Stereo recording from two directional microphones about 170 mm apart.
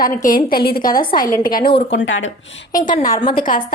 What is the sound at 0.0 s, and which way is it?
A woman's voice, 55° left (ahead or behind).